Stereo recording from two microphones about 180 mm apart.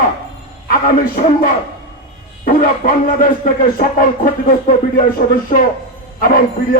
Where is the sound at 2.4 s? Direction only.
50° left (ahead or behind).